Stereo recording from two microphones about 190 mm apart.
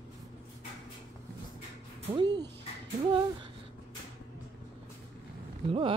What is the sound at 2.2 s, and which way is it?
Speech, 20° right (ahead or behind).